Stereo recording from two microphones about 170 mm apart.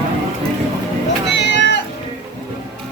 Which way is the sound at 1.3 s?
90° left.